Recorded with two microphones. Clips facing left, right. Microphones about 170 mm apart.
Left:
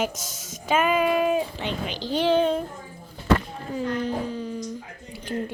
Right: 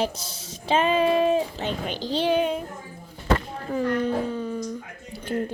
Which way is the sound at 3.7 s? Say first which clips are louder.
Right 3 dB; 55° right (ahead or behind).